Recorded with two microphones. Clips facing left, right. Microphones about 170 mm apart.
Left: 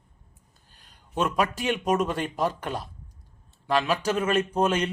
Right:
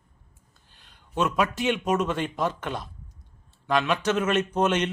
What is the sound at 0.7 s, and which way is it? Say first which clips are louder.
A man's voice: right 1 dB; 40° left (ahead or behind).